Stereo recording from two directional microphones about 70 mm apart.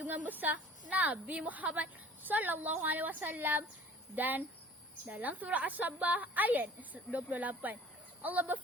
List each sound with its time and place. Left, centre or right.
0.0 s a woman's voice: right